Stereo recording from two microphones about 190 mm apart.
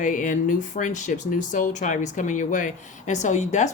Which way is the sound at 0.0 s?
45° left (ahead or behind).